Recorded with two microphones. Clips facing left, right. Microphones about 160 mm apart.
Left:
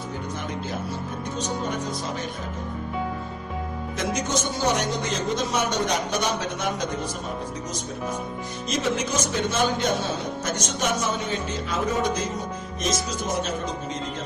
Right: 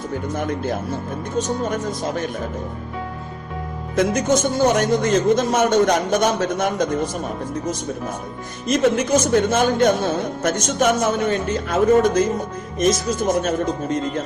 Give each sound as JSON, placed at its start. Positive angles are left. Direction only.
{"t": 0.3, "sound": "speech", "side_deg": -50}
{"t": 3.9, "sound": "speech", "side_deg": -55}
{"t": 8.6, "sound": "speech", "side_deg": -55}